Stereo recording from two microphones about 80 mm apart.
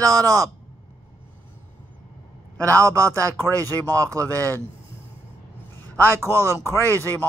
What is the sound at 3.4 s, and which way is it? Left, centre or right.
Speech, left.